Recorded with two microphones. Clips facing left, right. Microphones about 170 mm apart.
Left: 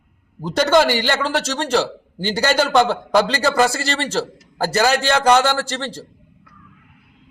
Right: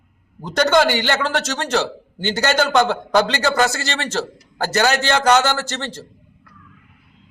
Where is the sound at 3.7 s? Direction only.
30° left (ahead or behind).